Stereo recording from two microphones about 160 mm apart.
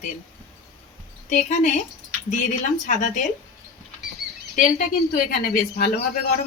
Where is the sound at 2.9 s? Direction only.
50° left (ahead or behind).